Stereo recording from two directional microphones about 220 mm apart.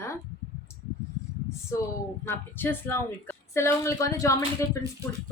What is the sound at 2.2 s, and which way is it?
A woman's voice, 10° left (ahead or behind).